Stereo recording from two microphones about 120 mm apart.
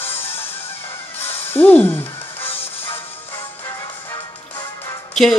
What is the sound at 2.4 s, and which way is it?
Music, 50° left (ahead or behind).